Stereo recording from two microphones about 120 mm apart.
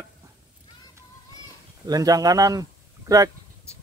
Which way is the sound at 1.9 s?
30° right (ahead or behind).